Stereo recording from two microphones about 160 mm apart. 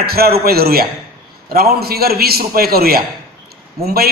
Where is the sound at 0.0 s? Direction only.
75° right (ahead or behind).